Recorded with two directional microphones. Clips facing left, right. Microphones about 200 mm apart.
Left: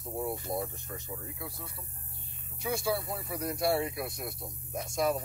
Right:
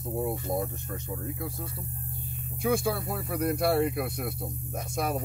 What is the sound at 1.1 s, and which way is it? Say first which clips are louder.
Speech: right 9 dB; 50° right (ahead or behind).